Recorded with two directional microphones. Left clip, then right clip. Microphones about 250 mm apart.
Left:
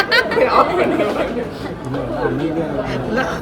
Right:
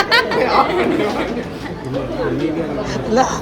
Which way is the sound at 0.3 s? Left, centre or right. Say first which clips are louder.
Left 1 dB; centre.